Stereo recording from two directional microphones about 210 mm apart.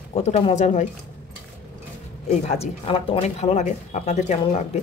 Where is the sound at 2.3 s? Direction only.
30° left (ahead or behind).